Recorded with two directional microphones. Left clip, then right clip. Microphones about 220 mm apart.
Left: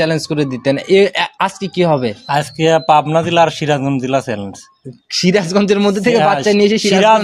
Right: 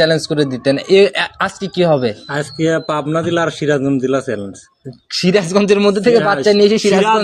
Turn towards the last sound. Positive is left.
turn(degrees=5)  # may be behind; listen again after turning